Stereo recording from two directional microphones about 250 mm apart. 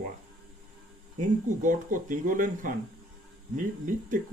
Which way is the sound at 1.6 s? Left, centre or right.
Right.